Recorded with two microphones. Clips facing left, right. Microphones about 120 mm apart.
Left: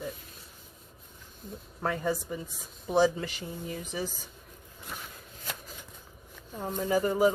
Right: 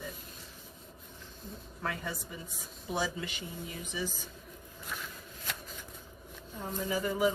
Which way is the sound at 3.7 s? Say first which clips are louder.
Left 3 dB; 45° left (ahead or behind).